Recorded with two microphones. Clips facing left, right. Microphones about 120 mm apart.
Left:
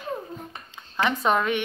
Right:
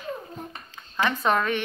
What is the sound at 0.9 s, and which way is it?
Speech, 10° left (ahead or behind).